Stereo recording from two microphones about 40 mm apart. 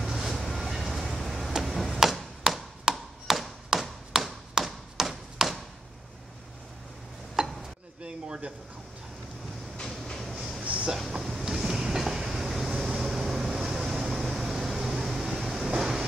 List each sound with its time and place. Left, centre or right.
0.0 s vehicle: centre
1.5 s a sound: centre
2.0 s tap: centre
2.8 s tap: centre
7.4 s chopping: centre
8.0 s a sound: right
10.1 s train: centre
10.6 s a sound: right
11.0 s train: centre